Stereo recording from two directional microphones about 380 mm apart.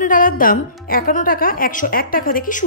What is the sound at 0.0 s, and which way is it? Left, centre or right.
A woman's voice, left.